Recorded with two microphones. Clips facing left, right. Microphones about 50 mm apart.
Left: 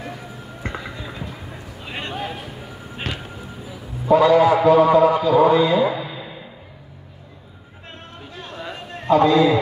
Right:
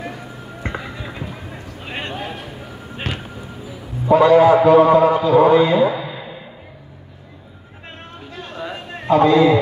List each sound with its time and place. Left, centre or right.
0.7 s music: right
1.2 s a sound: centre
2.3 s music: centre
4.1 s a man's voice: right
8.3 s a sound: centre
9.1 s a man's voice: right